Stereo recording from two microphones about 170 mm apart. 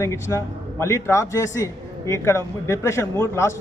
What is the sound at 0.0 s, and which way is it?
A man's voice, 15° left (ahead or behind).